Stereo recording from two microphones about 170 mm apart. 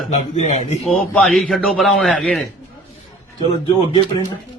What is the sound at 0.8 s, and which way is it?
A man's voice, 5° left (ahead or behind).